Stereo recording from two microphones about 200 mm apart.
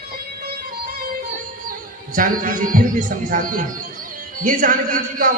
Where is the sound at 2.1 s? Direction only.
45° right (ahead or behind).